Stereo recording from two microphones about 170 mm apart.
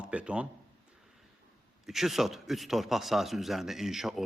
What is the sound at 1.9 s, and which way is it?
A man's voice, centre (ahead or behind).